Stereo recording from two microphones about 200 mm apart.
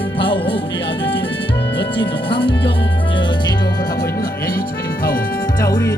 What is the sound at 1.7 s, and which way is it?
Music, 25° left (ahead or behind).